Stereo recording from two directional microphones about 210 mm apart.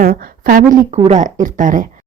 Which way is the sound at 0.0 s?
40° right (ahead or behind).